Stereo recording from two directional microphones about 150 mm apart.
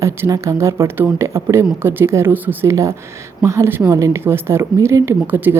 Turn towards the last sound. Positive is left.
turn(degrees=-10)  # may be behind; listen again after turning